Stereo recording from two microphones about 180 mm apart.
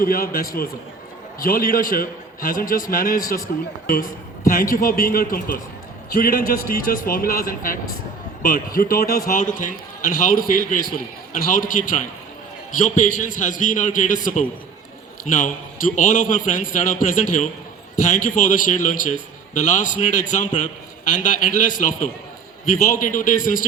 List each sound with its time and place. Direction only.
0.0 s a man's voice: 55° left (ahead or behind)